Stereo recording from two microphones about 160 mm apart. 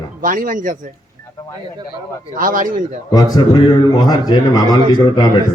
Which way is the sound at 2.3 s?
60° right (ahead or behind).